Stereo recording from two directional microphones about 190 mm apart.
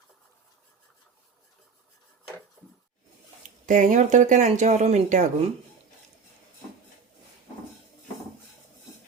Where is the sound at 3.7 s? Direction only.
40° right (ahead or behind).